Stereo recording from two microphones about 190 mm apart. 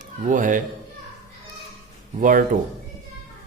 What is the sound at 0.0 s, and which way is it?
Speech, 40° right (ahead or behind).